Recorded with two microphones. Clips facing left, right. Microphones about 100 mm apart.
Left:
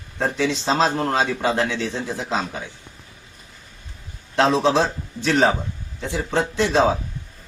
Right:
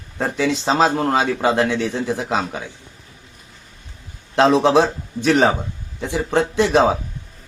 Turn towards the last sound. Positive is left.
turn(degrees=-15)  # may be behind; listen again after turning